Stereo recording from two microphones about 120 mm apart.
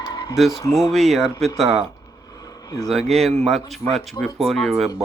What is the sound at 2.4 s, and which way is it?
Vehicle, 30° left (ahead or behind).